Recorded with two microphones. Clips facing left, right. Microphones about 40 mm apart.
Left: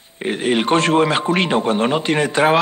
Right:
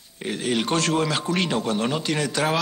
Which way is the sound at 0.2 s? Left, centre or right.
Left.